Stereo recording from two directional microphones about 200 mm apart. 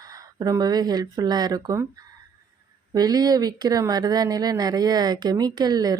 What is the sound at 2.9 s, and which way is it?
Speech, 20° right (ahead or behind).